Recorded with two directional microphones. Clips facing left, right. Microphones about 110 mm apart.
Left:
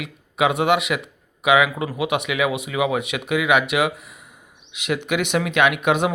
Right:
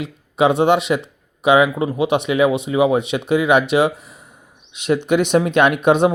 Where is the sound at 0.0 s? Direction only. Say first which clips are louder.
Right 4 dB; 30° right (ahead or behind).